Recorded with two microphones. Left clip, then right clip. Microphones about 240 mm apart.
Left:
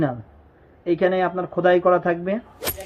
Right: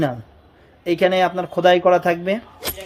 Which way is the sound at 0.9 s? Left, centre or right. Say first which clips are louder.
Right 3 dB; centre.